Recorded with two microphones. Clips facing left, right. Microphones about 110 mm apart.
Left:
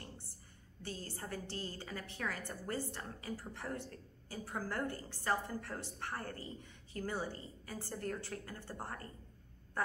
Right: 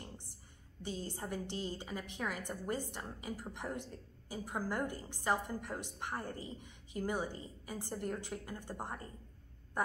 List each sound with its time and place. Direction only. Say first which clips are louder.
0.8 s a woman's voice: right 4 dB; 15° right (ahead or behind)